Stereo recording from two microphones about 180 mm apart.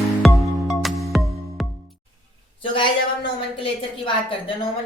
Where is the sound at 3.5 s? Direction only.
30° left (ahead or behind).